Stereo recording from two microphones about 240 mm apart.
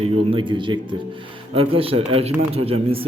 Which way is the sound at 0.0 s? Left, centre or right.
Right.